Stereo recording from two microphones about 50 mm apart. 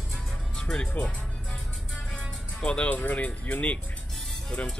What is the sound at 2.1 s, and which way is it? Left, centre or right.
Speech, left.